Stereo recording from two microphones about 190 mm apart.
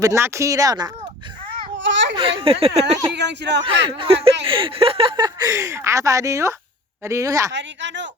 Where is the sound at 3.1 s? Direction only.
65° right (ahead or behind).